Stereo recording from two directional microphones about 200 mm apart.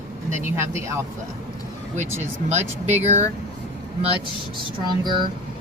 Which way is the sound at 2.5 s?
35° right (ahead or behind).